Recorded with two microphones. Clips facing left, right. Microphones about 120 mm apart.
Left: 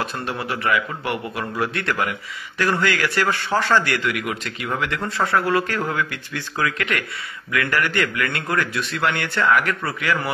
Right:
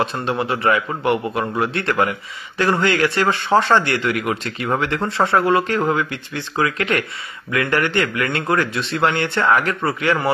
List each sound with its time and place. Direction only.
0.0 s a man's voice: 25° right (ahead or behind)